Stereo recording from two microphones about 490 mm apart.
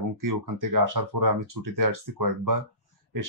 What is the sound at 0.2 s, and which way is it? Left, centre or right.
Speech, right.